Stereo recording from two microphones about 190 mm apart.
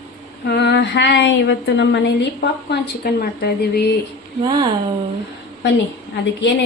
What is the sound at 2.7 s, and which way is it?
Speech, 55° left (ahead or behind).